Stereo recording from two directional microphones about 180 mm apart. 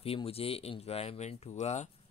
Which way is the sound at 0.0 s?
30° left (ahead or behind).